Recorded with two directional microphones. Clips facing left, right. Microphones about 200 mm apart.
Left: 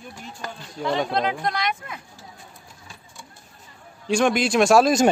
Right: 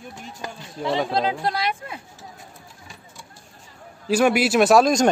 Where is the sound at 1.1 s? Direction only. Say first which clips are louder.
Right 1 dB; 30° right (ahead or behind).